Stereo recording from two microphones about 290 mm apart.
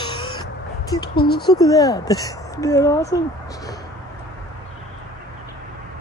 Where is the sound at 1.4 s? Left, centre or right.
Centre.